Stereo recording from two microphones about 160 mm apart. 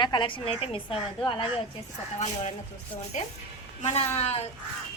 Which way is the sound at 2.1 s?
45° left (ahead or behind).